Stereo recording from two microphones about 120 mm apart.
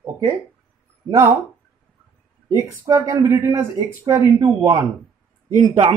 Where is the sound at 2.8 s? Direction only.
25° right (ahead or behind).